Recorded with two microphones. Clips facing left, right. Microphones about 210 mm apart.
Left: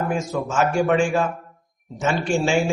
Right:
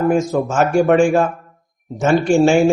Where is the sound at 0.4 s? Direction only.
50° right (ahead or behind).